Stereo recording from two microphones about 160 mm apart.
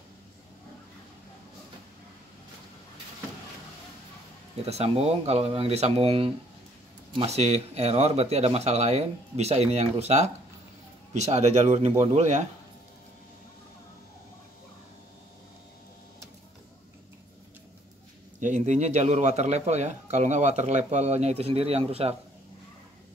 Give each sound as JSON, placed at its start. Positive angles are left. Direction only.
{"t": 4.6, "sound": "speech", "side_deg": -40}
{"t": 18.4, "sound": "speech", "side_deg": -50}